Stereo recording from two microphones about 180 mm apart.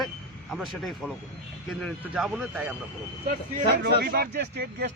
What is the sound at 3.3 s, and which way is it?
Speech, 50° right (ahead or behind).